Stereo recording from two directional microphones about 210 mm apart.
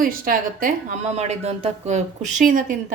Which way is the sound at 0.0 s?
40° right (ahead or behind).